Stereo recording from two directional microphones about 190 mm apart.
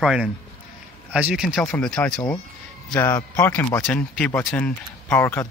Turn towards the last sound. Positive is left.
turn(degrees=10)  # may be behind; listen again after turning